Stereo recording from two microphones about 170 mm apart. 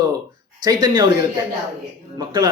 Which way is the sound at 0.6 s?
25° right (ahead or behind).